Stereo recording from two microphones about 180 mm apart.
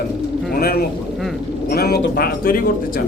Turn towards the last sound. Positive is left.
turn(degrees=55)  # may be behind; listen again after turning